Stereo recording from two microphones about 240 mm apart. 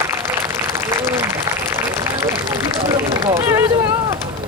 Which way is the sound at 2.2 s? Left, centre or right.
Centre.